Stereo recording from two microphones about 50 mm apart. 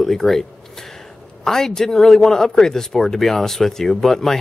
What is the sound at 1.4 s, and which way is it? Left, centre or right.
A man's voice, centre.